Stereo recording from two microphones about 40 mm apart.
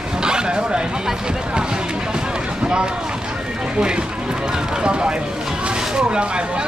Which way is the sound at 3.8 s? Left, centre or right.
Right.